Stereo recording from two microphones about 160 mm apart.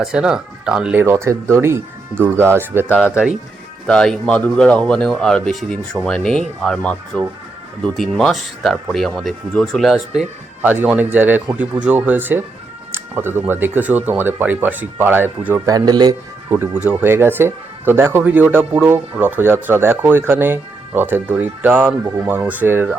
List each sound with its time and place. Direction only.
0.0 s speech: 5° right (ahead or behind)
1.0 s speech: 15° right (ahead or behind)
3.8 s speech: 5° left (ahead or behind); by 16.1 s 25° right (ahead or behind)
16.5 s speech: 10° right (ahead or behind)